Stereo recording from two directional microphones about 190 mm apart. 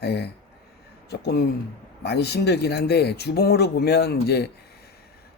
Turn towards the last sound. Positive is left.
turn(degrees=60)  # may be behind; listen again after turning